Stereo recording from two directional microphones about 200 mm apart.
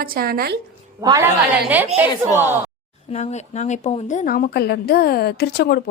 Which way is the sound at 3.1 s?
35° left (ahead or behind).